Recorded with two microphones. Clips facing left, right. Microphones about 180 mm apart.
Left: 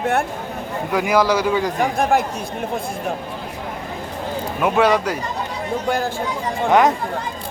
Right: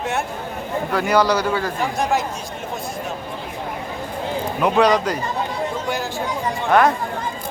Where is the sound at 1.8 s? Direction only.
55° left (ahead or behind).